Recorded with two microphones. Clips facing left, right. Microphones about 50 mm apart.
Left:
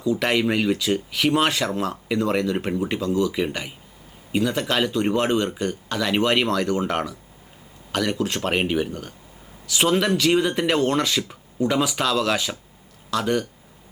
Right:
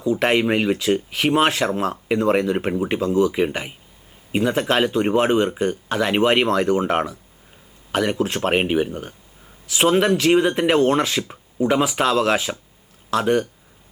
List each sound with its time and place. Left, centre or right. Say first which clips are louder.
0.0 s speech: right 3 dB; right